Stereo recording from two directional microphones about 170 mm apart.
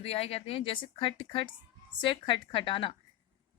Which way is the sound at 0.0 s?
35° left (ahead or behind).